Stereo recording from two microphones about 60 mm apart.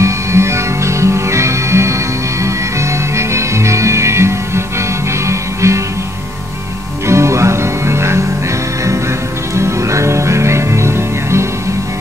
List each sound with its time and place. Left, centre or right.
0.0 s music: right
7.1 s music: right
9.6 s music: right